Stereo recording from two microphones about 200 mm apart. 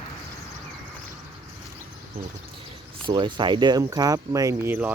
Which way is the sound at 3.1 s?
25° right (ahead or behind).